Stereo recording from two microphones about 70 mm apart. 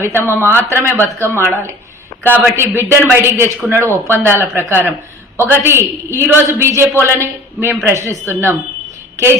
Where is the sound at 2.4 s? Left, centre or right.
Right.